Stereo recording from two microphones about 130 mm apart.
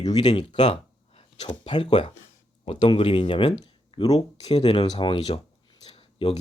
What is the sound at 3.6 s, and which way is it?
Speech, 30° left (ahead or behind).